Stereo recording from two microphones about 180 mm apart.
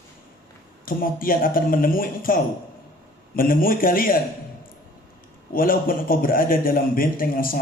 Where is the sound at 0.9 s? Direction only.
50° left (ahead or behind).